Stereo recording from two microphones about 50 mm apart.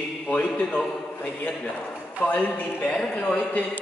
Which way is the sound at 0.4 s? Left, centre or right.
Left.